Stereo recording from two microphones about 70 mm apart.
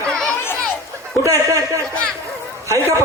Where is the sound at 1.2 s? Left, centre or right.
Right.